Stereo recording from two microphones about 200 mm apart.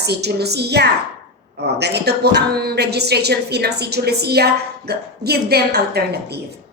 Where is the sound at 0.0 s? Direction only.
55° right (ahead or behind).